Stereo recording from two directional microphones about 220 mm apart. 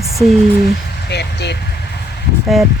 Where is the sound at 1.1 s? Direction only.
50° left (ahead or behind).